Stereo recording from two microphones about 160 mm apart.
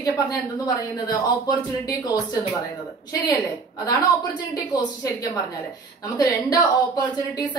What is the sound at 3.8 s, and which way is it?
A woman's voice, 25° left (ahead or behind).